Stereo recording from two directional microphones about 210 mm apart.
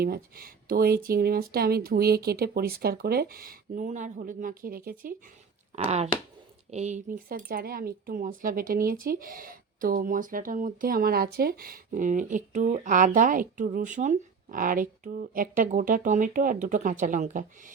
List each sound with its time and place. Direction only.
0.0 s speech: 45° right (ahead or behind)
5.7 s speech: 30° right (ahead or behind)